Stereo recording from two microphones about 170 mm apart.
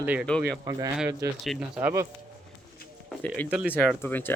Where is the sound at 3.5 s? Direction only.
5° right (ahead or behind).